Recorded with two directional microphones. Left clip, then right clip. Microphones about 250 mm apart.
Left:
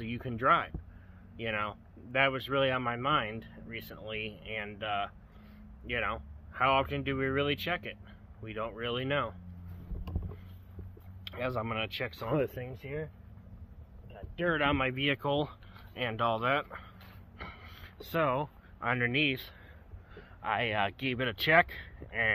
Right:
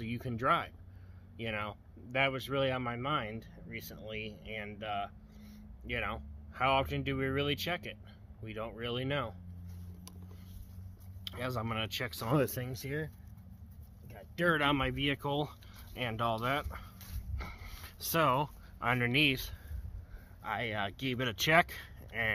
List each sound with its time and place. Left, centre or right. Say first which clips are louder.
0.0 s speech: left 4 dB; centre
11.2 s speech: left 3 dB; centre
12.4 s speech: right 1 dB; right
14.1 s a sound: right 1 dB; right
14.6 s speech: left 2 dB; centre
14.9 s speech: left 3 dB; centre
17.4 s a sound: left 2 dB; centre
20.4 s speech: left 5 dB; centre